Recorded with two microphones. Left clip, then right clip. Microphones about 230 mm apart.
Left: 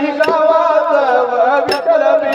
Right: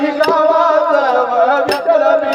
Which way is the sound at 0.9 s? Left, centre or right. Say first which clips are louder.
Even; right.